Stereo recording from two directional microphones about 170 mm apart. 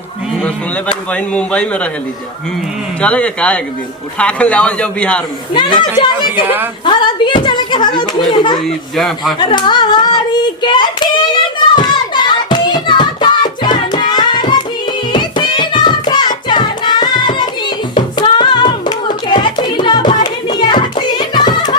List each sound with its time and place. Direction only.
0.4 s a man's voice: 5° left (ahead or behind)
3.0 s a man's voice: 5° left (ahead or behind)
5.5 s speech: 25° left (ahead or behind)
6.8 s speech: 25° left (ahead or behind)
9.0 s speech: centre (ahead or behind)
9.4 s speech: 25° left (ahead or behind)
11.7 s hands: 25° left (ahead or behind)
15.1 s singing: 25° left (ahead or behind)
17.9 s hands: 25° left (ahead or behind)